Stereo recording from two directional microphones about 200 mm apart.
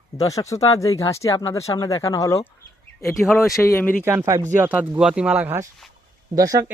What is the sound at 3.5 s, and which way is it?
Speech, 15° left (ahead or behind).